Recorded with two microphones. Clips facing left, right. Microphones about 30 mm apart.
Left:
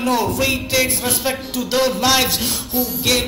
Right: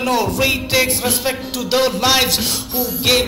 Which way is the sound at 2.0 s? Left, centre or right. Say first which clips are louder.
Even; centre.